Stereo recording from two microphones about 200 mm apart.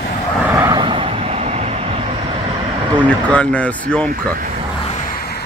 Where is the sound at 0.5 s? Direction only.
20° right (ahead or behind).